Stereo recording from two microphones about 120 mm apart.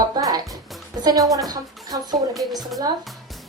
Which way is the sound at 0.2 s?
30° right (ahead or behind).